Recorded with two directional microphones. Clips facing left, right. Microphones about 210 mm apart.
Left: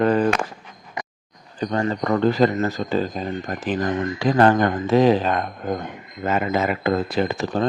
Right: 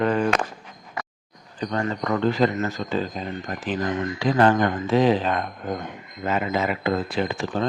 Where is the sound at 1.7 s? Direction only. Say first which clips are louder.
Left 3 dB; 30° left (ahead or behind).